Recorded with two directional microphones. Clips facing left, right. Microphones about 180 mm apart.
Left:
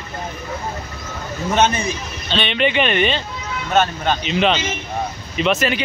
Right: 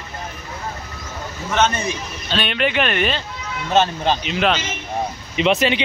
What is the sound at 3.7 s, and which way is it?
Speech, 30° right (ahead or behind).